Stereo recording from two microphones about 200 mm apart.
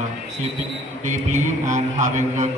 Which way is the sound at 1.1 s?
40° right (ahead or behind).